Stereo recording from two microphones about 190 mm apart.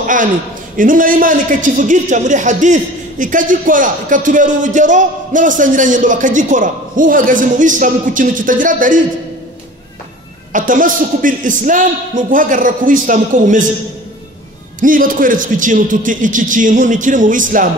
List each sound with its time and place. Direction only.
0.0 s a man's voice: 45° right (ahead or behind)
10.5 s a man's voice: 45° right (ahead or behind)
14.8 s a man's voice: 45° right (ahead or behind)